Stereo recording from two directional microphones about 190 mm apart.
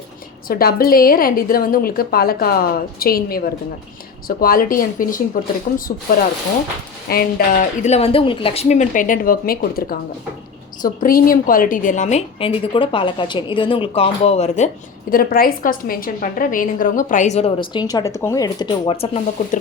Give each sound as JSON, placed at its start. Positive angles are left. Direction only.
{"t": 0.4, "sound": "speech", "side_deg": 50}
{"t": 7.1, "sound": "a woman's voice", "side_deg": 50}
{"t": 15.1, "sound": "a woman's voice", "side_deg": 50}